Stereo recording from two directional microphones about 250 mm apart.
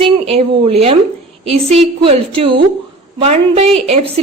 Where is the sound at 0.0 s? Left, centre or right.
Right.